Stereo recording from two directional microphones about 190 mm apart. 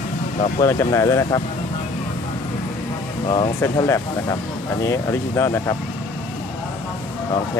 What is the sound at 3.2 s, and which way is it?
Speech, 25° left (ahead or behind).